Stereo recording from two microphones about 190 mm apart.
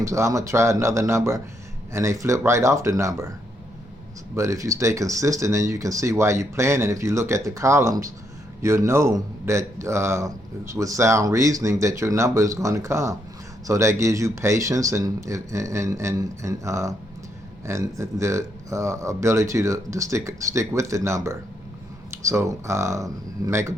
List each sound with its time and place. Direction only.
0.0 s a man's voice: 15° right (ahead or behind)
4.4 s a man's voice: 15° right (ahead or behind)